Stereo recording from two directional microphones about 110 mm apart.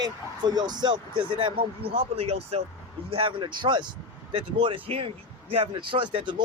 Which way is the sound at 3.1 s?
50° right (ahead or behind).